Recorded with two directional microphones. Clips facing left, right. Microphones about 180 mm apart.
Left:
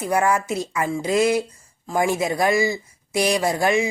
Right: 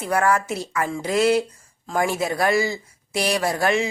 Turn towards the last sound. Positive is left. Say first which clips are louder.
# left 1 dB
turn(degrees=15)  # may be behind; listen again after turning